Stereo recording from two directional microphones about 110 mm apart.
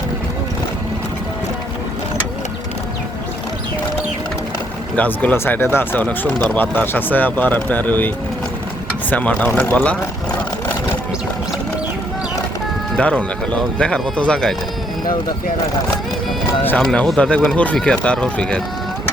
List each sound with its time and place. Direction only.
4.9 s speech: 15° left (ahead or behind)
13.0 s speech: 10° left (ahead or behind)
16.7 s speech: 5° left (ahead or behind)